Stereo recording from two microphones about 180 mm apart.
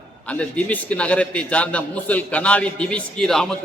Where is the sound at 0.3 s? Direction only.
5° left (ahead or behind).